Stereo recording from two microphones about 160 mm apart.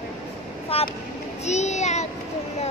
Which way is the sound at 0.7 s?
35° left (ahead or behind).